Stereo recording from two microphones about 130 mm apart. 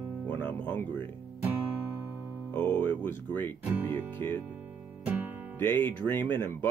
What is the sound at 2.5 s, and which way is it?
Music, 10° left (ahead or behind).